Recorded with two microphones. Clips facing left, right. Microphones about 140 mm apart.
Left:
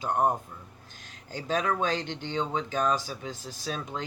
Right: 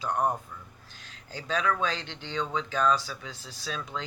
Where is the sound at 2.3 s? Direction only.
20° left (ahead or behind).